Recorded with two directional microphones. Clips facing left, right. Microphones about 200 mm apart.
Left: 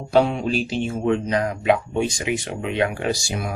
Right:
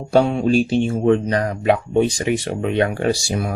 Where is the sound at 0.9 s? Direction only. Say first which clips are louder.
Right 2 dB; 35° right (ahead or behind).